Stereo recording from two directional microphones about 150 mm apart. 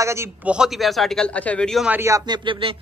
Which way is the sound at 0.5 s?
5° right (ahead or behind).